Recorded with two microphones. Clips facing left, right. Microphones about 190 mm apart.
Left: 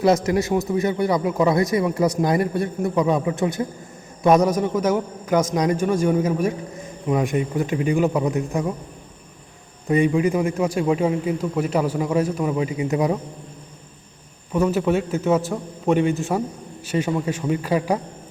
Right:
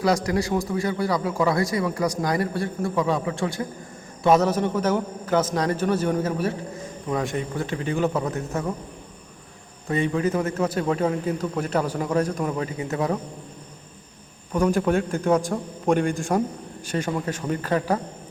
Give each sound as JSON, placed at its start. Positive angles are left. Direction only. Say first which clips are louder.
{"t": 0.0, "sound": "a man's voice", "louder": "left 4 dB", "side_deg": 25}
{"t": 9.9, "sound": "a man's voice", "louder": "left 4 dB", "side_deg": 15}
{"t": 14.5, "sound": "a man's voice", "louder": "left 1 dB", "side_deg": 5}